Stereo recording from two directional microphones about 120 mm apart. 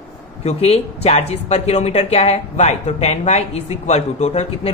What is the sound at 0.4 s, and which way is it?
Speech, 60° left (ahead or behind).